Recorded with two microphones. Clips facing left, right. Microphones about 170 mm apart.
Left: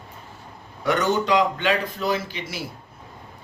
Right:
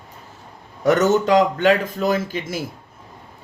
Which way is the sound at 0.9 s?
45° right (ahead or behind).